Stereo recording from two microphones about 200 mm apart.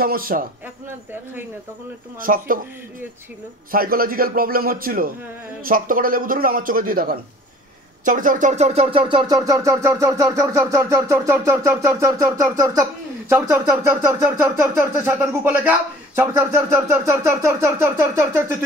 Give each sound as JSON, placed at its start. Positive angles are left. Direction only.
{"t": 0.0, "sound": "a man's voice", "side_deg": -45}
{"t": 2.1, "sound": "a man's voice", "side_deg": -45}
{"t": 3.7, "sound": "a man's voice", "side_deg": -45}
{"t": 8.0, "sound": "a sound", "side_deg": -40}